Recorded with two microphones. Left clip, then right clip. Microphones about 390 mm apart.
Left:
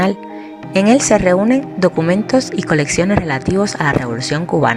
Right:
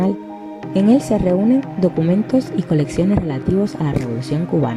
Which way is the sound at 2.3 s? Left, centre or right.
Centre.